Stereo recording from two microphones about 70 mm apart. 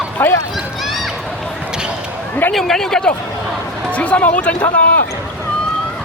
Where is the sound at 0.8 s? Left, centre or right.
Centre.